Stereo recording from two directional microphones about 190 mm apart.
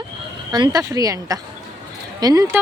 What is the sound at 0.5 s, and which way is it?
A woman's voice, 20° right (ahead or behind).